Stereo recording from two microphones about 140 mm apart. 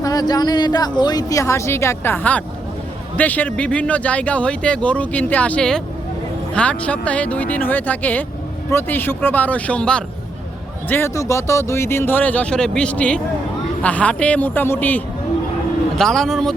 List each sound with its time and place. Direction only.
0.0 s a woman's voice: 25° left (ahead or behind); by 16.6 s 5° left (ahead or behind)